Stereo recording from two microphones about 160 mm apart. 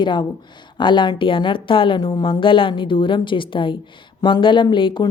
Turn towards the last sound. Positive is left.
turn(degrees=30)  # may be behind; listen again after turning